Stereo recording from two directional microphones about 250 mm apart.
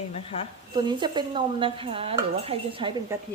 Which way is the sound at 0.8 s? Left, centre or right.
Centre.